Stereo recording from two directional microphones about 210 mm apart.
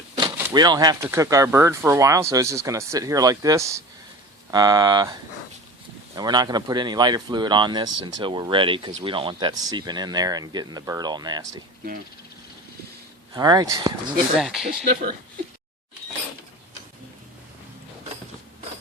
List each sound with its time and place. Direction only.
0.2 s speech: 20° right (ahead or behind)
6.1 s speech: 20° right (ahead or behind)
13.3 s speech: 20° right (ahead or behind)
14.3 s speech: centre (ahead or behind)